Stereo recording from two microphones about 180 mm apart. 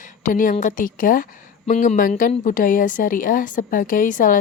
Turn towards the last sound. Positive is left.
turn(degrees=50)  # may be behind; listen again after turning